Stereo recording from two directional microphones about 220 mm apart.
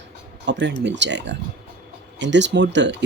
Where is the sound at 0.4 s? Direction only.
55° right (ahead or behind).